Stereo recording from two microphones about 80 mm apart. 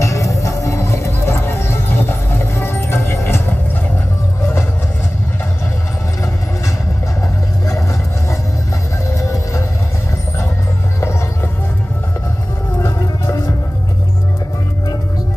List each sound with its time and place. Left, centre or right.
0.0 s music: left
9.3 s music: left
12.7 s music: left